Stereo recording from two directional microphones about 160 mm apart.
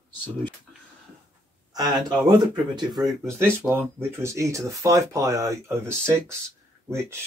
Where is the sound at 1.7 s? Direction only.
25° right (ahead or behind).